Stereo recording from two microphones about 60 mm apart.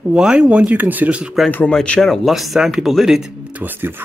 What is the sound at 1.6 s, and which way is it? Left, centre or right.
Speech, centre.